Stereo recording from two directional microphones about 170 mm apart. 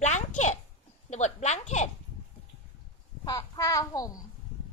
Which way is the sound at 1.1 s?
40° left (ahead or behind).